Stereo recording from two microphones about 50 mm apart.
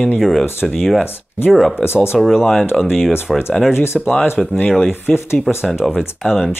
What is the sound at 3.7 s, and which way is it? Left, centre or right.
Speech, left.